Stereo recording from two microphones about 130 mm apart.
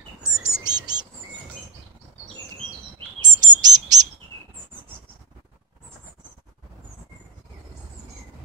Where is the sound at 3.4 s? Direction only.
30° right (ahead or behind).